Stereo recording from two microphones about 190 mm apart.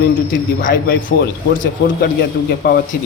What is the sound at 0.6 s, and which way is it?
Speech, 50° left (ahead or behind).